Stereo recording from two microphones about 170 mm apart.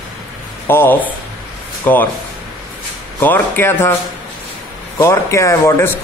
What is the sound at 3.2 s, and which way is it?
Speech, 10° left (ahead or behind).